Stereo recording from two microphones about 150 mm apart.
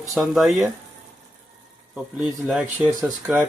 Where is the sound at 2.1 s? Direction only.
5° right (ahead or behind).